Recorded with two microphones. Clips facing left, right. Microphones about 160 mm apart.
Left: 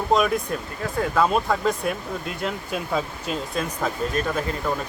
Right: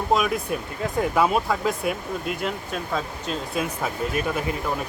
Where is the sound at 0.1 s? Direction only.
5° right (ahead or behind).